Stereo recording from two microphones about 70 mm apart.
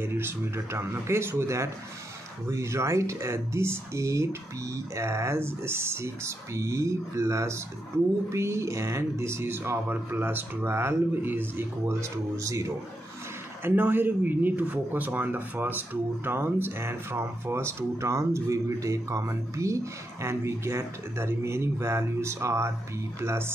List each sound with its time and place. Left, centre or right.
0.0 s speech: right
12.0 s speech: right
13.7 s speech: right